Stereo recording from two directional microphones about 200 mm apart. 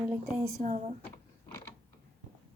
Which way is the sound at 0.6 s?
35° right (ahead or behind).